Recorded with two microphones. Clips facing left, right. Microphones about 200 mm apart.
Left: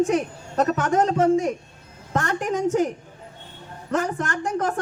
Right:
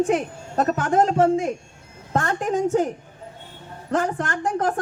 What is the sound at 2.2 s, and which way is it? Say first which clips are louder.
Speech: right 1 dB; 25° right (ahead or behind).